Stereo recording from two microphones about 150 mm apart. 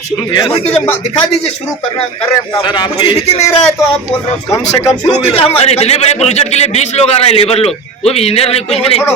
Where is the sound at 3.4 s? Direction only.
45° left (ahead or behind).